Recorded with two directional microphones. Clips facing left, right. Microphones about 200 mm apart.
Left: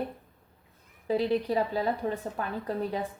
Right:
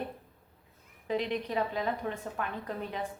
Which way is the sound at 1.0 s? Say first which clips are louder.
Left 5 dB; 35° left (ahead or behind).